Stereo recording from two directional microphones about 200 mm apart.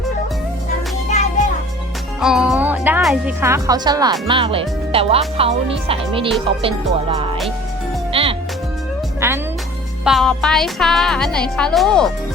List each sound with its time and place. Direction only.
2.2 s music: centre (ahead or behind)
3.4 s speech: 15° right (ahead or behind)
8.1 s music: 25° right (ahead or behind)
10.0 s speech: centre (ahead or behind)